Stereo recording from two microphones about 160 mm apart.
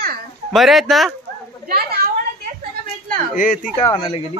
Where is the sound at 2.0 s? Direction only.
70° right (ahead or behind).